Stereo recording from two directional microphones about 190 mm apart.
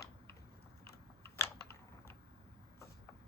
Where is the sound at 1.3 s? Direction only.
15° left (ahead or behind).